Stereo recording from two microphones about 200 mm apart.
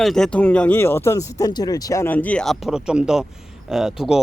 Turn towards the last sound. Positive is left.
turn(degrees=-5)  # may be behind; listen again after turning